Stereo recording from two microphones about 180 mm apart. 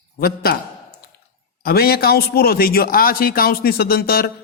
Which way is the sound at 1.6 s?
60° left (ahead or behind).